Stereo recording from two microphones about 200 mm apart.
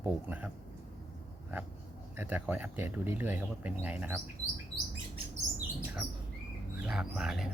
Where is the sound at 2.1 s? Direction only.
10° right (ahead or behind).